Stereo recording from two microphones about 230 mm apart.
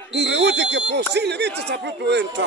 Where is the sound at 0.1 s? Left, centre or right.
Right.